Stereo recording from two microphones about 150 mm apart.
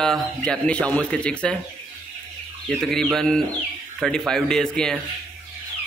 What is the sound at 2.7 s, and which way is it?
A man's voice, 5° left (ahead or behind).